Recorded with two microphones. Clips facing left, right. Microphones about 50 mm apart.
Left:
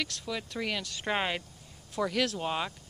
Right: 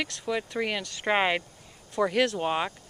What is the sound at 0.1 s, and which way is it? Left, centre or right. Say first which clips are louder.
Speech: right 6 dB; right.